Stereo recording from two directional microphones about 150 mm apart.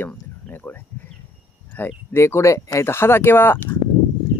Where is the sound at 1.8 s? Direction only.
15° left (ahead or behind).